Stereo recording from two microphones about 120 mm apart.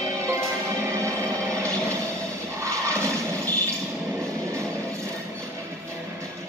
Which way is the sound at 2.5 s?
25° right (ahead or behind).